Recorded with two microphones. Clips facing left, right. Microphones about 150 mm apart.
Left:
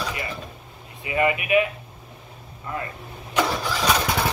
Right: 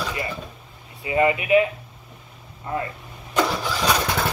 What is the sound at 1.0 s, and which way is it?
Speech, 25° right (ahead or behind).